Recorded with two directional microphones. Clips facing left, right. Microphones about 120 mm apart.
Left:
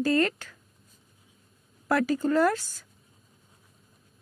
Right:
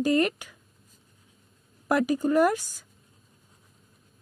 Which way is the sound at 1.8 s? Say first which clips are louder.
Right 1 dB; 15° right (ahead or behind).